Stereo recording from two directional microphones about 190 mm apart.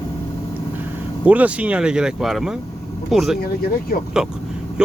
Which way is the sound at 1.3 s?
10° right (ahead or behind).